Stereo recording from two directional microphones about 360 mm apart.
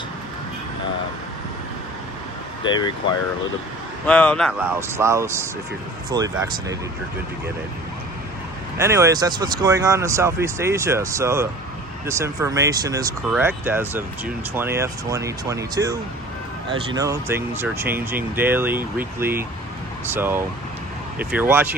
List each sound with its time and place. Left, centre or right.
2.6 s speech: centre
8.8 s speech: centre